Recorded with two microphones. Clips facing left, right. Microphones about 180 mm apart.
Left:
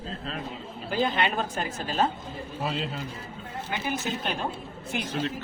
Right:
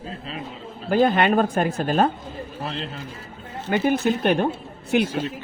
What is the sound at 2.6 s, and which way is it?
Speech, 5° left (ahead or behind).